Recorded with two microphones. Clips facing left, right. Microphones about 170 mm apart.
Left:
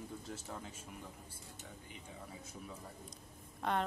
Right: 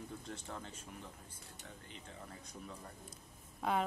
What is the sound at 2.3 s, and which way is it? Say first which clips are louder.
A man's voice: left 1 dB; 5° left (ahead or behind).